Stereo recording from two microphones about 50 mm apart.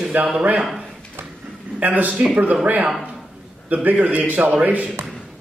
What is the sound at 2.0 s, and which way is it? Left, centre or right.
A man's voice, right.